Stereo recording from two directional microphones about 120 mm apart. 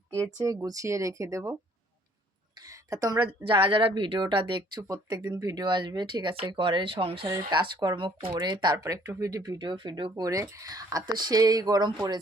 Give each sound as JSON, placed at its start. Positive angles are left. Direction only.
{"t": 0.4, "sound": "speech", "side_deg": -30}
{"t": 2.6, "sound": "a sound", "side_deg": -30}
{"t": 3.4, "sound": "speech", "side_deg": -45}
{"t": 4.8, "sound": "speech", "side_deg": -30}
{"t": 7.3, "sound": "speech", "side_deg": -35}